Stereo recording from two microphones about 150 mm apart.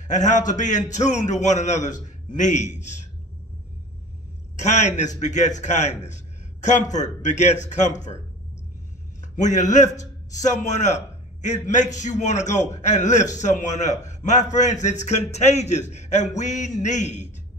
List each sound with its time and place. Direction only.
0.1 s a man's voice: 55° left (ahead or behind)
4.6 s a man's voice: 50° left (ahead or behind)
9.3 s a man's voice: 55° left (ahead or behind)